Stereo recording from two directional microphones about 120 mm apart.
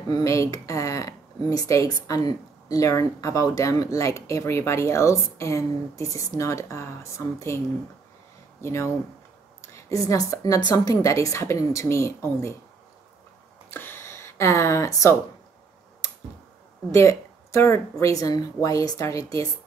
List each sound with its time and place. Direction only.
0.1 s speech: 25° left (ahead or behind)
13.7 s a sound: 20° left (ahead or behind)
16.9 s speech: 25° left (ahead or behind)